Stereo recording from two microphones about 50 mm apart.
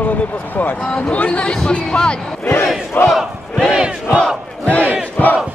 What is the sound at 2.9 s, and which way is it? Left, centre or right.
Battle cry, left.